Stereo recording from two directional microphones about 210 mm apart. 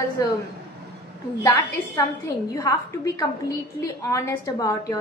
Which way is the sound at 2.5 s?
15° left (ahead or behind).